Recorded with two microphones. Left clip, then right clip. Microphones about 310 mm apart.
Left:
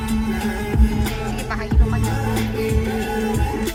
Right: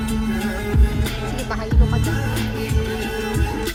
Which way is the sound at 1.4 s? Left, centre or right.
Centre.